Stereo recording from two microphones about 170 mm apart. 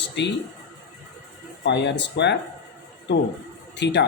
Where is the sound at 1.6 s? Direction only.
90° left.